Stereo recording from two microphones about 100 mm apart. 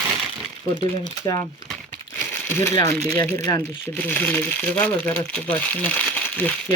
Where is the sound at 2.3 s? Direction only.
25° left (ahead or behind).